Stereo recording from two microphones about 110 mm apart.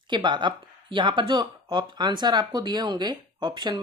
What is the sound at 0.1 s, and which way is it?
Speech, 45° right (ahead or behind).